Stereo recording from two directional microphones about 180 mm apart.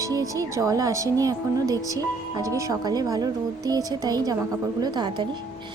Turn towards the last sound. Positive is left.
turn(degrees=-25)  # may be behind; listen again after turning